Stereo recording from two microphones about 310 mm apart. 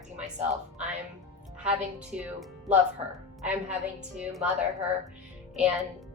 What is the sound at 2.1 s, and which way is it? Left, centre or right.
A woman's voice, centre.